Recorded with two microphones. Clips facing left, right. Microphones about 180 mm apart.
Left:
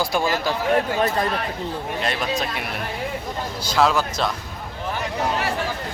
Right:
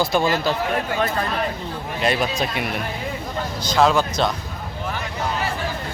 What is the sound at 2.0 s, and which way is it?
Speech, centre (ahead or behind).